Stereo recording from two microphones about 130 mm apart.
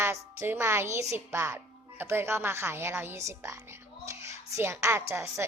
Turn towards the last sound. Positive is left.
turn(degrees=-20)  # may be behind; listen again after turning